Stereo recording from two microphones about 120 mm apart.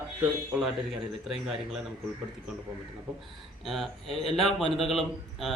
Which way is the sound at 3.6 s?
Centre (ahead or behind).